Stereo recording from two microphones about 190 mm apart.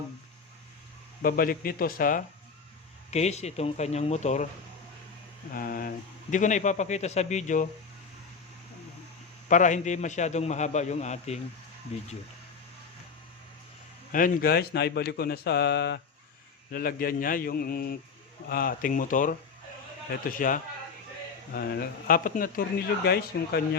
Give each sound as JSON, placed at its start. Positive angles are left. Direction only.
{"t": 1.2, "sound": "speech", "side_deg": 50}
{"t": 3.1, "sound": "a man's voice", "side_deg": 35}
{"t": 5.5, "sound": "a man's voice", "side_deg": 50}
{"t": 9.5, "sound": "a man's voice", "side_deg": 40}
{"t": 14.1, "sound": "speech", "side_deg": 45}
{"t": 16.7, "sound": "speech", "side_deg": 50}